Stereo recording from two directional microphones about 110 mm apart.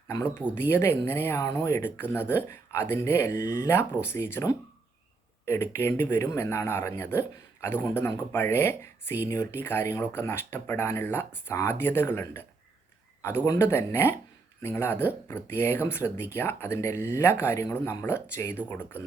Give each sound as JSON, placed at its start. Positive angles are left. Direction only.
{"t": 0.7, "sound": "speech", "side_deg": 20}